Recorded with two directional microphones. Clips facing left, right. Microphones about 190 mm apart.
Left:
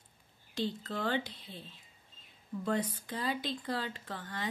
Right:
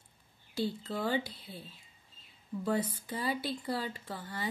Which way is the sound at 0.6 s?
10° right (ahead or behind).